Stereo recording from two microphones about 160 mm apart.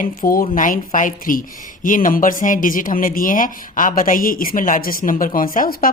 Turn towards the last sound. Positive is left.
turn(degrees=60)  # may be behind; listen again after turning